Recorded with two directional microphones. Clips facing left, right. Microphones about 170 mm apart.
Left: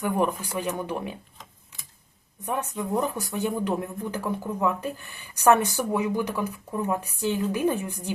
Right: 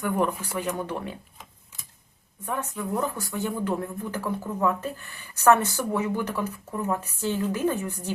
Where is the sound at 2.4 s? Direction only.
20° left (ahead or behind).